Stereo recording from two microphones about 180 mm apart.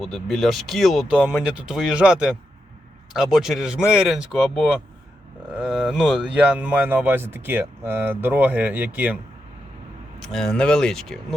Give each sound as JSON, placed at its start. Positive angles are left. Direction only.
{"t": 0.0, "sound": "speech", "side_deg": 0}
{"t": 5.6, "sound": "speech", "side_deg": 0}
{"t": 10.2, "sound": "speech", "side_deg": 0}